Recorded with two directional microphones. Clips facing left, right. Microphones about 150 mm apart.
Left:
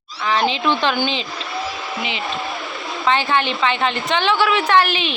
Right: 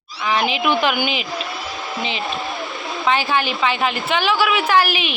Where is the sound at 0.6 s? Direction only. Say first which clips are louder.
Even; 10° right (ahead or behind).